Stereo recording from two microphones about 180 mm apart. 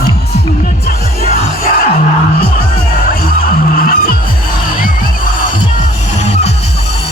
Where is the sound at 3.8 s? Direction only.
55° left (ahead or behind).